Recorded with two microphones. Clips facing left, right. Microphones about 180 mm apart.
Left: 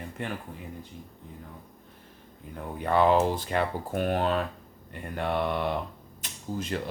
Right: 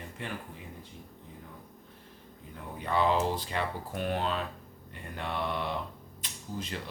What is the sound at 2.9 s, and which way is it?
Speech, 55° left (ahead or behind).